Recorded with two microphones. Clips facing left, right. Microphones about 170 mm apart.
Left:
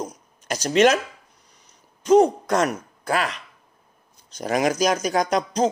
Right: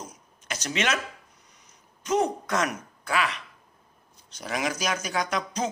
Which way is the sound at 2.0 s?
30° left (ahead or behind).